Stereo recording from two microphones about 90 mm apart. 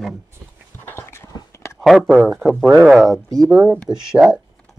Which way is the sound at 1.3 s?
35° left (ahead or behind).